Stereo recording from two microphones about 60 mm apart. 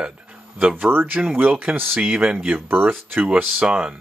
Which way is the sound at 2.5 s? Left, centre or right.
Right.